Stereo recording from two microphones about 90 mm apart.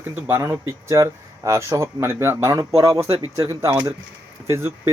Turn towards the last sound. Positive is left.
turn(degrees=-30)  # may be behind; listen again after turning